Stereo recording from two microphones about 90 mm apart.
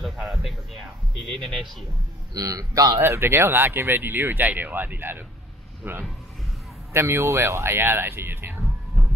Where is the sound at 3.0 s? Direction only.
30° right (ahead or behind).